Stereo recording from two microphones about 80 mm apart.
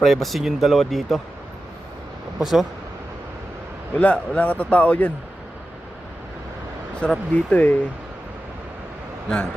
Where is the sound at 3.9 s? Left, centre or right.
Centre.